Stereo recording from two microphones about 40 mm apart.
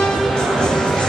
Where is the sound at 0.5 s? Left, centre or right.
Centre.